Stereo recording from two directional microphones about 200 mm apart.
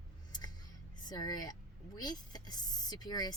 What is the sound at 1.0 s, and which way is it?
Speech, 20° left (ahead or behind).